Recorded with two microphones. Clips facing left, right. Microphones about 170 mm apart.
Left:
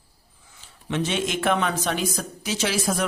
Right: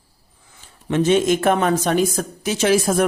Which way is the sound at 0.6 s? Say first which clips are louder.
Right 7 dB; 45° right (ahead or behind).